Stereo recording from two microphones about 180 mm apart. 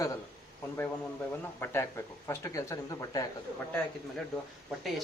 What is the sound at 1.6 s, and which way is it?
A man's voice, 15° left (ahead or behind).